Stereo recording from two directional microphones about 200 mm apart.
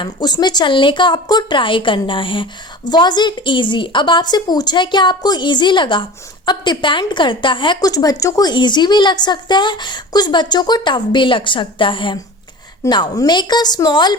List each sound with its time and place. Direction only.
0.0 s a woman's voice: 20° left (ahead or behind)